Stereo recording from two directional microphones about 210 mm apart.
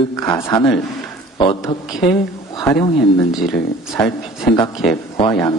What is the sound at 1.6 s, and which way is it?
Speech, centre (ahead or behind).